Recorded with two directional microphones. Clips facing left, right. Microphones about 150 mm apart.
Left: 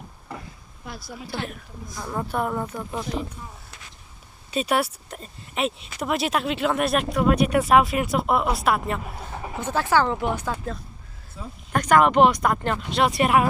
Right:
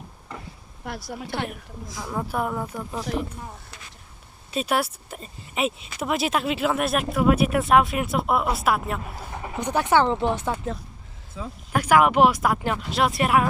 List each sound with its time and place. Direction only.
0.9 s a woman's voice: 70° right (ahead or behind)
2.0 s speech: 5° right (ahead or behind)
3.1 s a woman's voice: 60° right (ahead or behind)
4.5 s speech: centre (ahead or behind)
9.6 s speech: 15° right (ahead or behind)
11.7 s speech: 5° right (ahead or behind)